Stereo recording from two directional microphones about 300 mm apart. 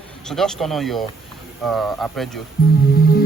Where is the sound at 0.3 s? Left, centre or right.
Centre.